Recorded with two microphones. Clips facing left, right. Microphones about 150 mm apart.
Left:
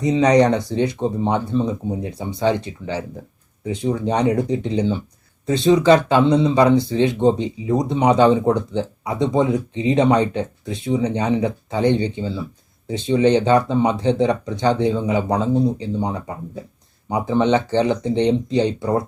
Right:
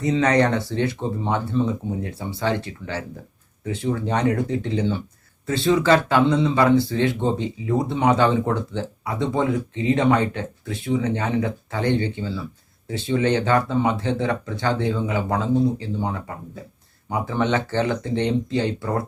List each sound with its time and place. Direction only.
0.0 s speech: 15° left (ahead or behind)